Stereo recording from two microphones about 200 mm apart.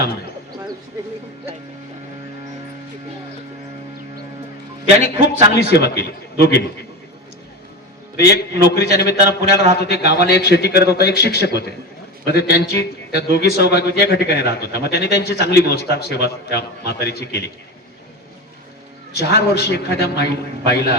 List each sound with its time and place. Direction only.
4.9 s a man's voice: 30° right (ahead or behind)
5.5 s a man's voice: 55° left (ahead or behind)
8.4 s a man's voice: 55° left (ahead or behind)
19.1 s a man's voice: 55° left (ahead or behind)